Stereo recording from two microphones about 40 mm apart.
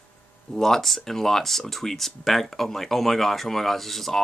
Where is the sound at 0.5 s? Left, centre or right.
Centre.